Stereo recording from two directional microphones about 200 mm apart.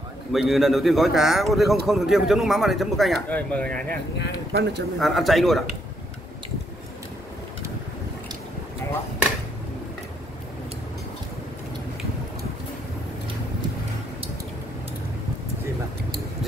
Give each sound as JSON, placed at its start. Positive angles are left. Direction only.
{"t": 0.3, "sound": "speech", "side_deg": 0}
{"t": 4.5, "sound": "speech", "side_deg": -55}
{"t": 4.9, "sound": "speech", "side_deg": 0}